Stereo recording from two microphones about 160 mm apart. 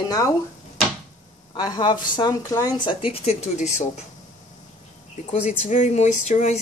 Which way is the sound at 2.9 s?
40° left (ahead or behind).